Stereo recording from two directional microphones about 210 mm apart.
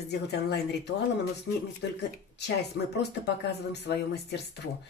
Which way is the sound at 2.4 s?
55° left (ahead or behind).